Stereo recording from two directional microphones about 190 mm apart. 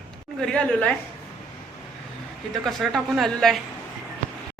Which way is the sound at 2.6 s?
Centre (ahead or behind).